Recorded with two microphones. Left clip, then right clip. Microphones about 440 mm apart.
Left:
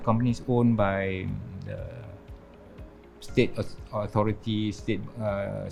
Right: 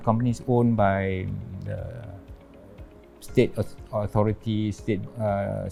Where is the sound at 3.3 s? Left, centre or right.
Right.